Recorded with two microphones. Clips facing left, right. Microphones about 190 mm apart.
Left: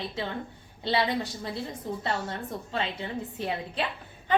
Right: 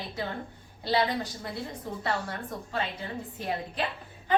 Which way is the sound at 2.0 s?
25° left (ahead or behind).